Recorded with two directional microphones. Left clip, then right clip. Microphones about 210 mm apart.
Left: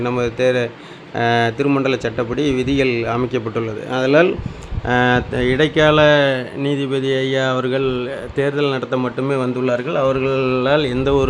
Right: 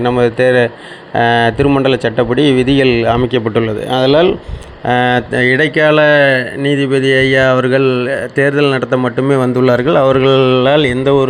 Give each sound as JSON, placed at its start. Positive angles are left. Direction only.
{"t": 0.0, "sound": "speech", "side_deg": -10}